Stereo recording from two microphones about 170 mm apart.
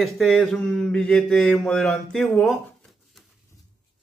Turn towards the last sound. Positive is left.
turn(degrees=0)  # may be behind; listen again after turning